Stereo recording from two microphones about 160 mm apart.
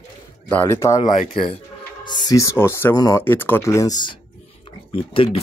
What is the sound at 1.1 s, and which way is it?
Speech, 40° left (ahead or behind).